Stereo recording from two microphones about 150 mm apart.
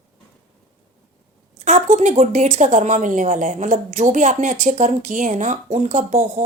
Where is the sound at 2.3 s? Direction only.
55° right (ahead or behind).